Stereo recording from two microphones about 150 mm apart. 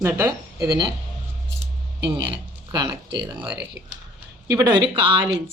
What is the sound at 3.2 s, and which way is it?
Speech, 10° right (ahead or behind).